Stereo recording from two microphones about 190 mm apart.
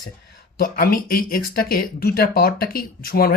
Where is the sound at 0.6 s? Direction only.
50° left (ahead or behind).